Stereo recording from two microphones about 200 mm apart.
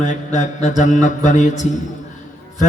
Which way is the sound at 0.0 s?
35° left (ahead or behind).